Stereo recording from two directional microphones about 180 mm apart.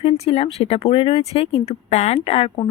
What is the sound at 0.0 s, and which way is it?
Speech, 35° left (ahead or behind).